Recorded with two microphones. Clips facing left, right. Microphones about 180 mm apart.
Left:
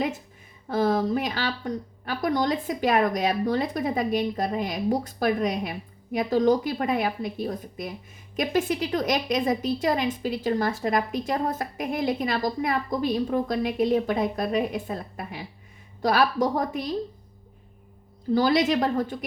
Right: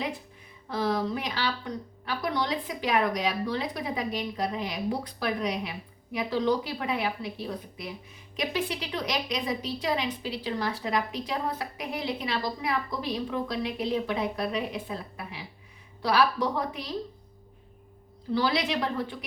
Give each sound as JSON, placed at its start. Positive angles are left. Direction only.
{"t": 0.7, "sound": "a woman's voice", "side_deg": 45}
{"t": 18.3, "sound": "a woman's voice", "side_deg": 45}